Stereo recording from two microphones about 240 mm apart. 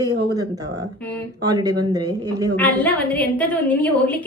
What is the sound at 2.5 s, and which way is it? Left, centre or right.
A woman's voice, centre.